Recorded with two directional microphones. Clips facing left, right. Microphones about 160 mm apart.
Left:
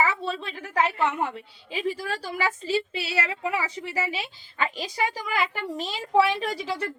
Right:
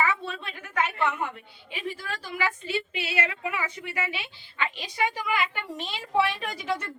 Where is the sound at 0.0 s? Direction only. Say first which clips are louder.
Left 2 dB; 35° left (ahead or behind).